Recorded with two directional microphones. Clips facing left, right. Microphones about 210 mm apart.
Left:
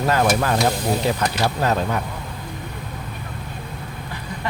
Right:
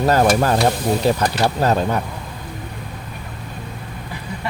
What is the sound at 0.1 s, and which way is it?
Speech, 40° right (ahead or behind).